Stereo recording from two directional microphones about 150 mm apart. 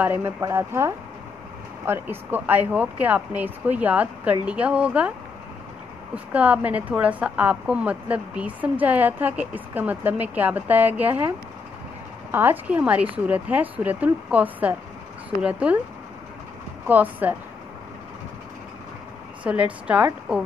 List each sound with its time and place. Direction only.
0.0 s a woman's voice: 15° right (ahead or behind)
6.1 s a woman's voice: 10° right (ahead or behind)
16.8 s a woman's voice: 10° right (ahead or behind)
19.4 s a woman's voice: 10° right (ahead or behind)